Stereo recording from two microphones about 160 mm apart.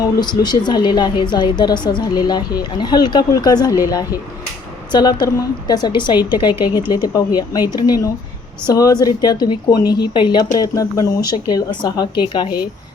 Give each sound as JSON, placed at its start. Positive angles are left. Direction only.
{"t": 0.0, "sound": "a woman's voice", "side_deg": 25}